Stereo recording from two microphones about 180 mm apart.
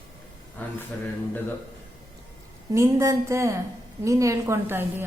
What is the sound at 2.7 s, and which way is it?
A woman's voice, 15° right (ahead or behind).